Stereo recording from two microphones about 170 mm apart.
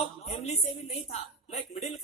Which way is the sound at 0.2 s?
40° left (ahead or behind).